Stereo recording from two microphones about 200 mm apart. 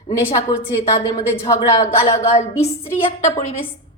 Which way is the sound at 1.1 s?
15° left (ahead or behind).